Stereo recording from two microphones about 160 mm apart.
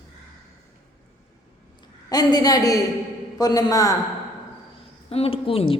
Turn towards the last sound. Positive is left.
turn(degrees=35)  # may be behind; listen again after turning